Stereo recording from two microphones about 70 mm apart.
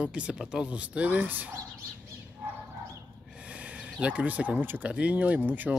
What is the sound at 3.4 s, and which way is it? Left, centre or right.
Speech, centre.